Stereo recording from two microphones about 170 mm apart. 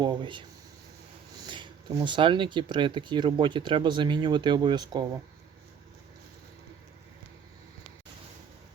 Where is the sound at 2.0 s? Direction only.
30° right (ahead or behind).